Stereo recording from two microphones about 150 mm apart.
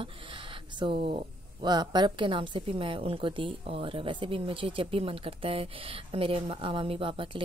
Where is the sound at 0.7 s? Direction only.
35° right (ahead or behind).